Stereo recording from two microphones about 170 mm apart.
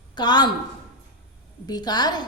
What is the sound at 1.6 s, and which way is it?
Speech, 25° left (ahead or behind).